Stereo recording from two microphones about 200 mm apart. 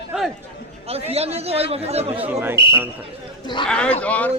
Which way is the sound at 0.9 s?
30° right (ahead or behind).